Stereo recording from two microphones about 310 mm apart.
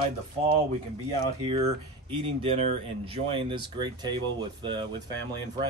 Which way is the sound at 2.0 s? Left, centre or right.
Centre.